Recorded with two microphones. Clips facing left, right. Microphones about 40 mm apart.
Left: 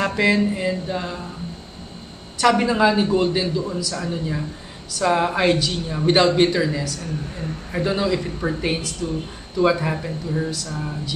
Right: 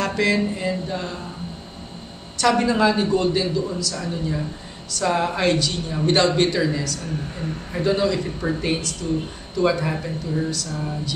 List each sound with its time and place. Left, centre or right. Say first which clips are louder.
0.0 s a man's voice: left 2 dB; centre
2.3 s a man's voice: left 1 dB; centre